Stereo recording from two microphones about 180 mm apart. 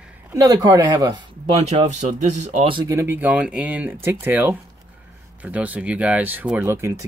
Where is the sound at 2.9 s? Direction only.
15° right (ahead or behind).